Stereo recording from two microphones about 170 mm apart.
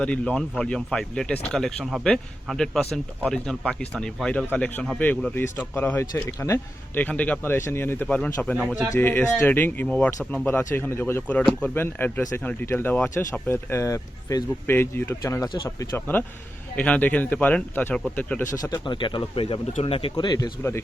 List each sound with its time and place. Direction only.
0.0 s speech: 5° left (ahead or behind); by 15.9 s 25° left (ahead or behind)
16.0 s speech: 10° left (ahead or behind)
18.5 s speech: 20° left (ahead or behind)
20.6 s speech: 15° left (ahead or behind)